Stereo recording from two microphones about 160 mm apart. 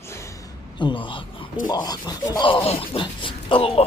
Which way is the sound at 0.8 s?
30° left (ahead or behind).